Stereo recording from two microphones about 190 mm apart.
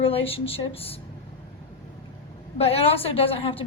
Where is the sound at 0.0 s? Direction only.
30° left (ahead or behind).